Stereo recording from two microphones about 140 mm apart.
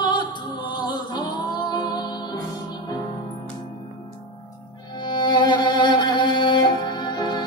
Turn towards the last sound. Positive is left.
turn(degrees=30)  # may be behind; listen again after turning